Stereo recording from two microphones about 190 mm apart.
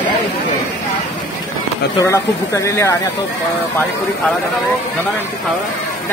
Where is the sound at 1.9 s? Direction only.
15° left (ahead or behind).